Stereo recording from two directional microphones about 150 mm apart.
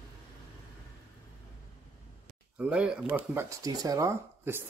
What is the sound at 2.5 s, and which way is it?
Speech, 5° right (ahead or behind).